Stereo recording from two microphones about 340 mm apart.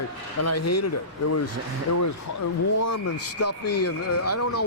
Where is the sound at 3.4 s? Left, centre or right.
Left.